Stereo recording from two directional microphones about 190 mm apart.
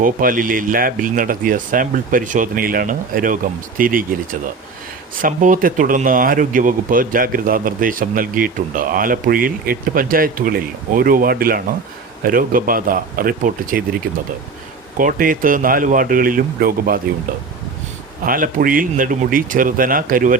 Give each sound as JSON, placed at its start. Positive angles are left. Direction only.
{"t": 0.0, "sound": "speech", "side_deg": -45}
{"t": 14.9, "sound": "speech", "side_deg": -45}
{"t": 18.3, "sound": "speech", "side_deg": -45}